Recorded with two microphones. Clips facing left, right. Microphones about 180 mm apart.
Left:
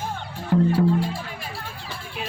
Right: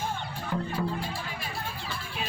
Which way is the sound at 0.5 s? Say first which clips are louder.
Left 13 dB; 65° left (ahead or behind).